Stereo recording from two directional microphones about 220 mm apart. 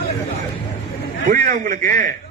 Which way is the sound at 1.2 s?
40° right (ahead or behind).